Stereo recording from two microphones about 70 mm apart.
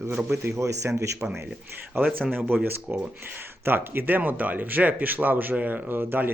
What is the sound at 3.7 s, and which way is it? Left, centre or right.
Speech, right.